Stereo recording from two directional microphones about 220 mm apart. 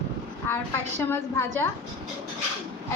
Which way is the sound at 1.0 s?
10° left (ahead or behind).